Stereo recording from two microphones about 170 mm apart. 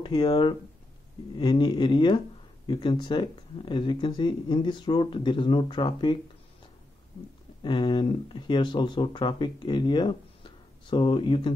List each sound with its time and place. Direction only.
0.0 s speech: 30° left (ahead or behind)
7.6 s speech: 30° left (ahead or behind)